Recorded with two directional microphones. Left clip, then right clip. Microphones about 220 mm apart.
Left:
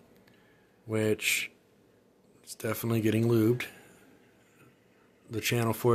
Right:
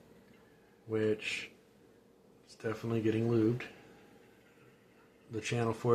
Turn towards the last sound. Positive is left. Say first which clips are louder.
# left 5 dB
turn(degrees=50)  # may be behind; listen again after turning